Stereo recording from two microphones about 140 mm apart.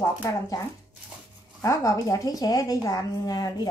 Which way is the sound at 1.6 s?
20° left (ahead or behind).